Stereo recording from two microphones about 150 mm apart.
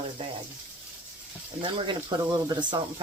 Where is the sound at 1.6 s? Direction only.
35° right (ahead or behind).